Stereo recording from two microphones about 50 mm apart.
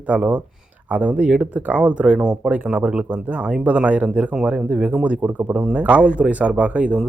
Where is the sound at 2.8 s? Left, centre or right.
Right.